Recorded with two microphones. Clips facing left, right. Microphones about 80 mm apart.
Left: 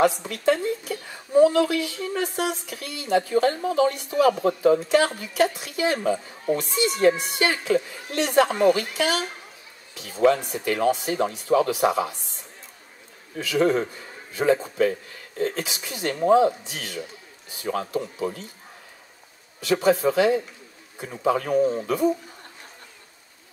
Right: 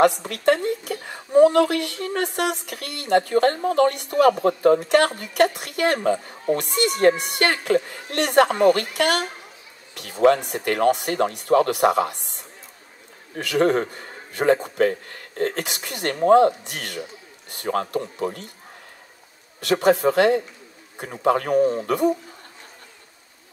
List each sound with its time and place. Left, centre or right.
0.3 s a woman's voice: right
4.2 s a woman's voice: right
10.2 s a woman's voice: right
19.6 s a woman's voice: right
21.8 s a woman's voice: right